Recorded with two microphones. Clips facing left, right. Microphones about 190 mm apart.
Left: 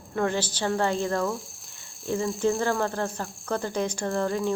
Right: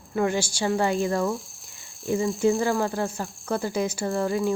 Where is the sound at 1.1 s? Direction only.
Centre (ahead or behind).